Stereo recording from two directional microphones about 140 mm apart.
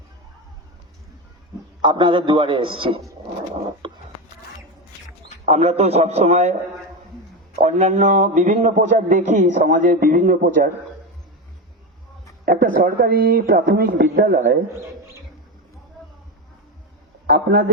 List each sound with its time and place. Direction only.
1.8 s a man's voice: 35° right (ahead or behind)
3.8 s a sound: 35° right (ahead or behind)
5.5 s a man's voice: 50° right (ahead or behind)
7.6 s a man's voice: 60° right (ahead or behind); by 10.7 s 80° right
12.5 s a woman's voice: 90° right
17.2 s a man's voice: 90° right